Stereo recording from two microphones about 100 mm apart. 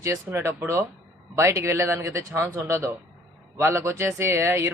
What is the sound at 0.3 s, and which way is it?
Speech, 25° right (ahead or behind).